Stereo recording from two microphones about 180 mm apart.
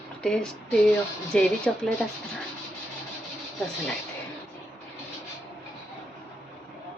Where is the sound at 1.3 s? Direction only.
5° left (ahead or behind).